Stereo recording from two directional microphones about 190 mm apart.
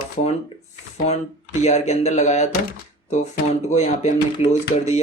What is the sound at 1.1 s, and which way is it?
Speech, 35° left (ahead or behind).